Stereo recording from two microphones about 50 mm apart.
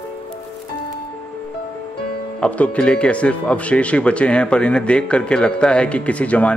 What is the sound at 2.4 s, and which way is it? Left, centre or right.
Speech, left.